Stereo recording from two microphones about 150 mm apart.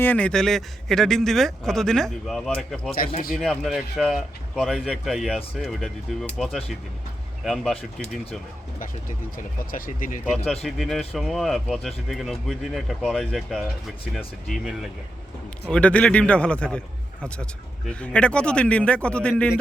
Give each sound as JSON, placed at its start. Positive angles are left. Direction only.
{"t": 0.0, "sound": "speech", "side_deg": 10}
{"t": 9.7, "sound": "speech", "side_deg": 70}
{"t": 10.3, "sound": "a man's voice", "side_deg": 0}